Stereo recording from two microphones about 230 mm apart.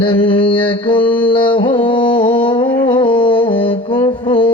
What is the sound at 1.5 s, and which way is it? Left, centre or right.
Carnatic music, left.